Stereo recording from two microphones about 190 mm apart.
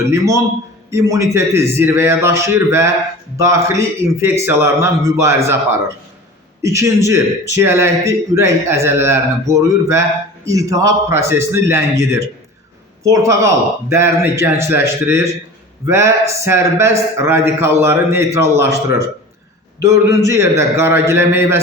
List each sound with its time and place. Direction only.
0.1 s a man's voice: 15° right (ahead or behind)
6.6 s a man's voice: 15° right (ahead or behind)
19.8 s a man's voice: 15° right (ahead or behind)